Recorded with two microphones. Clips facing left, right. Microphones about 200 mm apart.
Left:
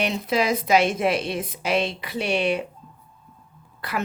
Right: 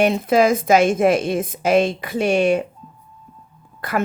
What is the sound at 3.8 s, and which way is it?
Speech, 45° right (ahead or behind).